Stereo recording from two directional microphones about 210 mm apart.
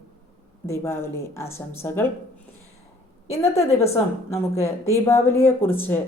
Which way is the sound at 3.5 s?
30° left (ahead or behind).